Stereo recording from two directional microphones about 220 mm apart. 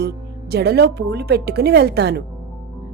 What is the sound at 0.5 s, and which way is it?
A woman's voice, 50° right (ahead or behind).